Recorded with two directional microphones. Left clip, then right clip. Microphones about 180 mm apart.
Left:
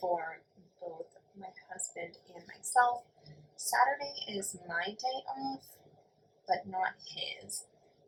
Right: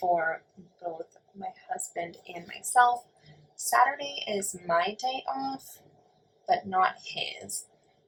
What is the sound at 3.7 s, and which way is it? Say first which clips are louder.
Speech: right 5 dB; 50° right (ahead or behind).